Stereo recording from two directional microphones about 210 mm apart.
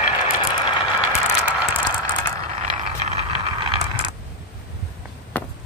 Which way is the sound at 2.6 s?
30° right (ahead or behind).